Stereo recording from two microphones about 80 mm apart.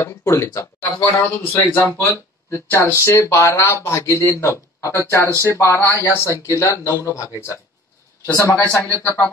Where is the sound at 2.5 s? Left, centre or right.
Left.